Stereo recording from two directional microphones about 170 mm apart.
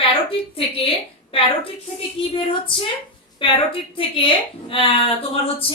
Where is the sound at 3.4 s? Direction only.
30° left (ahead or behind).